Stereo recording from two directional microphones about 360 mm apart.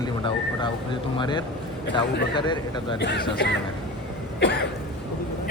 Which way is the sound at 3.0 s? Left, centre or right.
Left.